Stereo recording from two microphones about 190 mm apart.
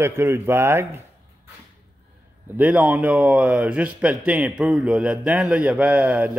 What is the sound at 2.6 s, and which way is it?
Speech, 10° right (ahead or behind).